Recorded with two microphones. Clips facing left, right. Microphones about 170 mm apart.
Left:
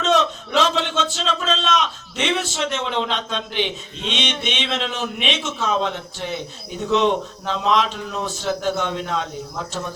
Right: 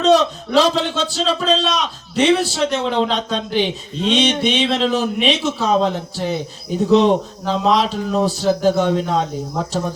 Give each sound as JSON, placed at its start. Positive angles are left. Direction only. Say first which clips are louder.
{"t": 0.0, "sound": "speech", "louder": "right 5 dB", "side_deg": -35}